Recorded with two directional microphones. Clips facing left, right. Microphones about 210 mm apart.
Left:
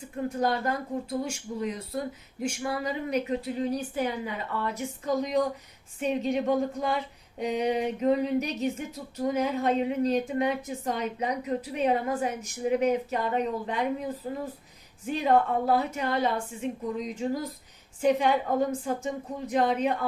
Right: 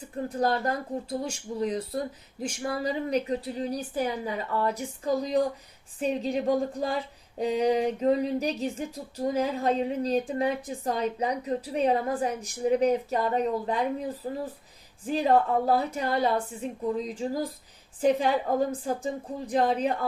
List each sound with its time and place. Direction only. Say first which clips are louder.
0.3 s a woman's voice: right 1 dB; 35° right (ahead or behind)
15.0 s a woman's voice: right 1 dB; 35° right (ahead or behind)